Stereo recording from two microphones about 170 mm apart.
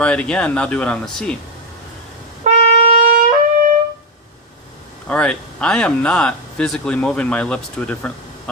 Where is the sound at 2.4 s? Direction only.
40° right (ahead or behind).